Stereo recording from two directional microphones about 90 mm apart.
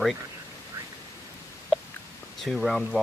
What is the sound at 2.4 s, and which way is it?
Speech, centre (ahead or behind).